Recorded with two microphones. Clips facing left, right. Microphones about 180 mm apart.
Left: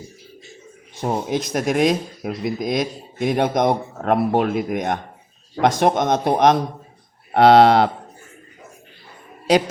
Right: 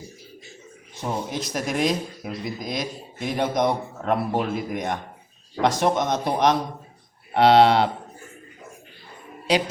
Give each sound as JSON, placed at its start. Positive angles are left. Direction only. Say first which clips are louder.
{"t": 1.3, "sound": "speech", "louder": "left 6 dB", "side_deg": 55}
{"t": 9.5, "sound": "speech", "louder": "left 5 dB", "side_deg": 45}